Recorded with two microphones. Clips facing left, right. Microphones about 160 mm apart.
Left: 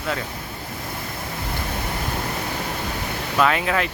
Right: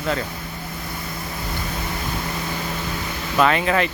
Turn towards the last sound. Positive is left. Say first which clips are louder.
# right 2 dB
turn(degrees=0)  # may be behind; listen again after turning